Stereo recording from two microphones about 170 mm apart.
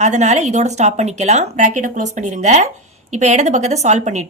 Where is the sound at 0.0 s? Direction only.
45° right (ahead or behind).